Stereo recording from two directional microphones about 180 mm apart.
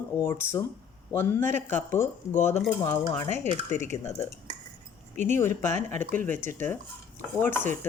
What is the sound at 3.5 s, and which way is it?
Speech, 40° right (ahead or behind).